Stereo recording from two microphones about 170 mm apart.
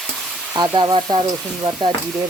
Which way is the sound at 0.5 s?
25° right (ahead or behind).